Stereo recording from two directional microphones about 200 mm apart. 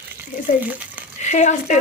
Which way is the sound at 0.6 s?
10° right (ahead or behind).